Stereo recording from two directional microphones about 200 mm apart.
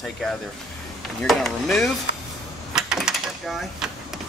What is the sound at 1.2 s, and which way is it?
Speech, centre (ahead or behind).